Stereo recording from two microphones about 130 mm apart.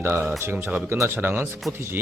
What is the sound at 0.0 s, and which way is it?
Speech, 20° right (ahead or behind).